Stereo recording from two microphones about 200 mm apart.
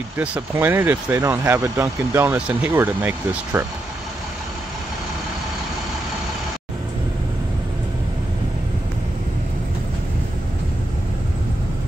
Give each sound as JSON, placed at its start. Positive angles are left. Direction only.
{"t": 0.2, "sound": "speech", "side_deg": -10}